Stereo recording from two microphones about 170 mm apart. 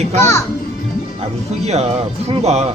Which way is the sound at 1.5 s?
40° right (ahead or behind).